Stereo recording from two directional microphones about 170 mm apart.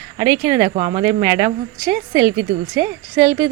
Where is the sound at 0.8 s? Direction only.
30° right (ahead or behind).